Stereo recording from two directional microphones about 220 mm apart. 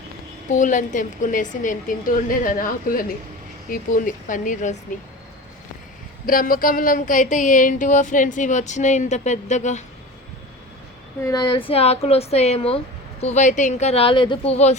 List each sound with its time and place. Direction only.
0.5 s speech: 35° left (ahead or behind)
6.2 s speech: 40° left (ahead or behind)
11.2 s speech: 15° left (ahead or behind)